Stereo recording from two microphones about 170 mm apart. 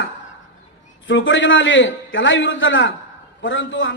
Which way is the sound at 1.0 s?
90° left.